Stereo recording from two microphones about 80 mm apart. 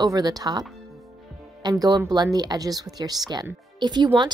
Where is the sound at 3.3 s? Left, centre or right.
Right.